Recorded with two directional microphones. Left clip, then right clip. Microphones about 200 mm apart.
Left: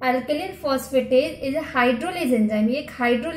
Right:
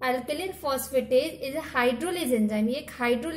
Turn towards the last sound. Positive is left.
turn(degrees=-40)  # may be behind; listen again after turning